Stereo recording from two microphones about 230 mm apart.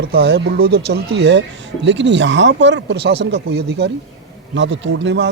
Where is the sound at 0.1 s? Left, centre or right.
Right.